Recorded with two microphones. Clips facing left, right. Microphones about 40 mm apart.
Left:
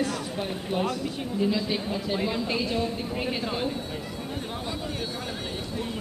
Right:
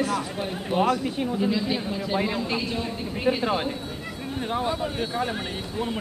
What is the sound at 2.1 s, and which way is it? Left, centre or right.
Speech, centre.